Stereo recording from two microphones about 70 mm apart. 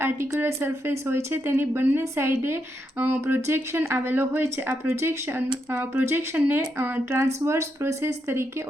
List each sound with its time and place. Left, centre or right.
0.0 s speech: right
7.2 s speech: right